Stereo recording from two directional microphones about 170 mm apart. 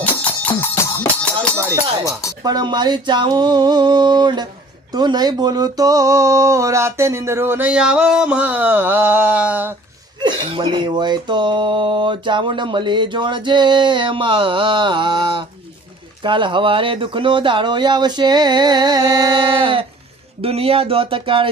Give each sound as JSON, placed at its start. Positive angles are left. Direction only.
{"t": 0.0, "sound": "music", "side_deg": 10}
{"t": 2.4, "sound": "speech", "side_deg": -25}
{"t": 10.2, "sound": "speech", "side_deg": -25}